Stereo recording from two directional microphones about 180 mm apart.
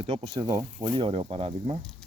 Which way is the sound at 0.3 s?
20° right (ahead or behind).